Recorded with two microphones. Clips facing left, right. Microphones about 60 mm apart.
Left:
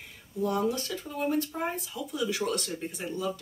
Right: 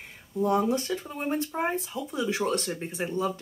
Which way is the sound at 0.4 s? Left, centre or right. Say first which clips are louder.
Right 4 dB; right.